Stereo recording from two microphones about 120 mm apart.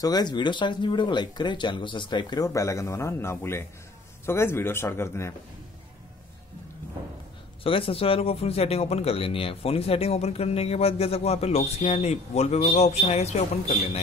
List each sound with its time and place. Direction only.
0.0 s speech: 35° left (ahead or behind)
7.6 s speech: 50° left (ahead or behind)